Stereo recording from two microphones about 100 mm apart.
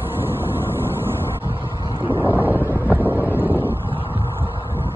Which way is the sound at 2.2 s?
20° right (ahead or behind).